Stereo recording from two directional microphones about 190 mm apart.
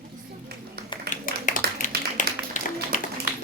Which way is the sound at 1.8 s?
40° left (ahead or behind).